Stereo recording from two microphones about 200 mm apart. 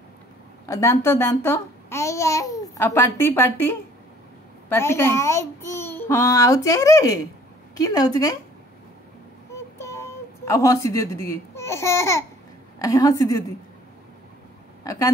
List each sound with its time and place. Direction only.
0.7 s a child's voice: 15° left (ahead or behind)
9.5 s a sound: 15° left (ahead or behind)
12.7 s a child's voice: 15° left (ahead or behind)